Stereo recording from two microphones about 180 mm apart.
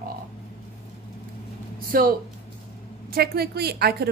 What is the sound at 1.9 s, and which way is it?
Speech, 55° right (ahead or behind).